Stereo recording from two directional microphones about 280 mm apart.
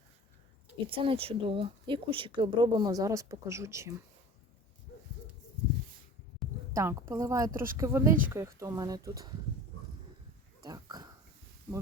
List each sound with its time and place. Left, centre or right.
0.9 s speech: centre
6.4 s a sound: centre
6.7 s speech: centre
10.6 s dog: centre